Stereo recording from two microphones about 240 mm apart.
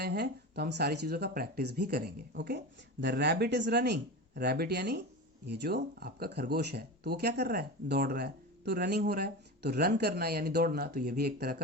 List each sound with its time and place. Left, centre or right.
0.0 s speech: right